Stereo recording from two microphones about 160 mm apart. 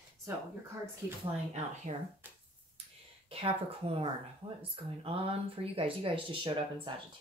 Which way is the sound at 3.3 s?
35° right (ahead or behind).